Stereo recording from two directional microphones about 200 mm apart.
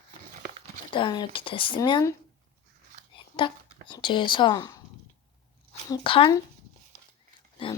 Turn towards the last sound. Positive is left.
turn(degrees=25)  # may be behind; listen again after turning